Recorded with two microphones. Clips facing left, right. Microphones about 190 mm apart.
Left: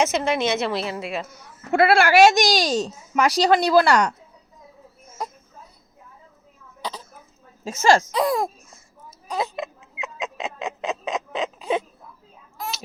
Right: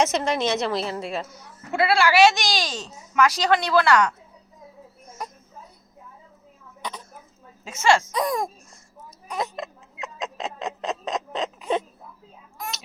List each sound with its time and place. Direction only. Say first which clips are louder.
0.0 s a woman's voice: left 1 dB; centre (ahead or behind)
1.7 s speech: left 4 dB; 50° left (ahead or behind)
7.6 s speech: left 3 dB; 40° left (ahead or behind)
8.3 s a sound: left 3 dB; 5° left (ahead or behind)